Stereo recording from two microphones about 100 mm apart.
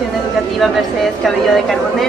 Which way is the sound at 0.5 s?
Centre (ahead or behind).